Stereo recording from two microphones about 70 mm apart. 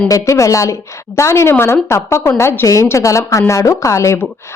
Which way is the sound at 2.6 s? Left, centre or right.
Left.